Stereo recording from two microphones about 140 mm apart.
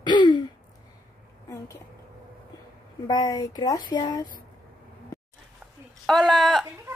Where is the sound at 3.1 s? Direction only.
25° left (ahead or behind).